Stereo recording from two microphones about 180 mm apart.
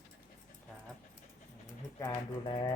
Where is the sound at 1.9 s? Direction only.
15° left (ahead or behind).